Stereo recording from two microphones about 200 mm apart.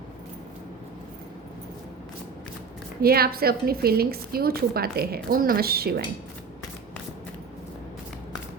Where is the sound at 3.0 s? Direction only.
50° right (ahead or behind).